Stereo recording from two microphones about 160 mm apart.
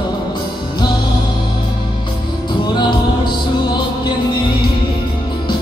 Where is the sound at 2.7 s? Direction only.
30° left (ahead or behind).